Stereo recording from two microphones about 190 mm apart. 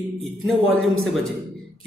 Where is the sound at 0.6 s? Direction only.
90° right.